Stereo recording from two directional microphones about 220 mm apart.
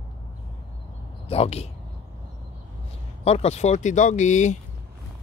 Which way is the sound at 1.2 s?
25° left (ahead or behind).